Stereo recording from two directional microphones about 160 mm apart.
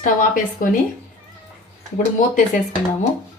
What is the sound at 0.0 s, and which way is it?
Speech, 60° left (ahead or behind).